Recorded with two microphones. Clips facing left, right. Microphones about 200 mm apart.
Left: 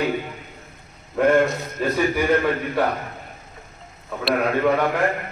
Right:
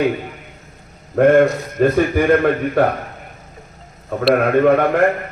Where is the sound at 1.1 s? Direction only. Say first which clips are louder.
Right 6 dB; 55° right (ahead or behind).